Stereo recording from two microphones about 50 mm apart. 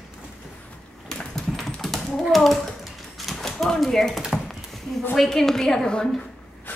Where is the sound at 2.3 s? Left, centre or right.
Centre.